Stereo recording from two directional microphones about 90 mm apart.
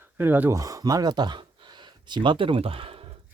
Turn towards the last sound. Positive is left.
turn(degrees=-90)